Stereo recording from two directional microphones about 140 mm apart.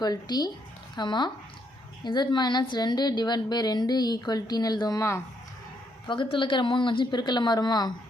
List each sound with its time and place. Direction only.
0.0 s a woman's voice: 30° left (ahead or behind)
6.1 s a woman's voice: 35° left (ahead or behind)